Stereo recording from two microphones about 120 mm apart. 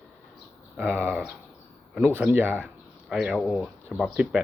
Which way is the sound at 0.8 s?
15° right (ahead or behind).